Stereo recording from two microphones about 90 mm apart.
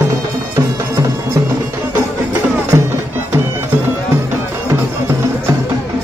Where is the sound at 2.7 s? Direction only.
35° right (ahead or behind).